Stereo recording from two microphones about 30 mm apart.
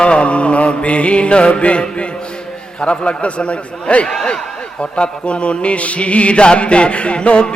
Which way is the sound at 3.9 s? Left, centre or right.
Left.